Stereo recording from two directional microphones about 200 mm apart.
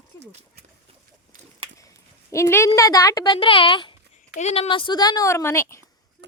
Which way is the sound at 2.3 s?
15° left (ahead or behind).